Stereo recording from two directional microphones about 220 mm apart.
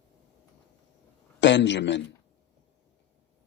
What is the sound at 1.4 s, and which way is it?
Speech, 55° left (ahead or behind).